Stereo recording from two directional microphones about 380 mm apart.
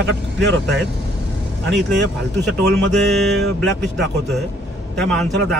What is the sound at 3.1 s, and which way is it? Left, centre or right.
A man's voice, centre.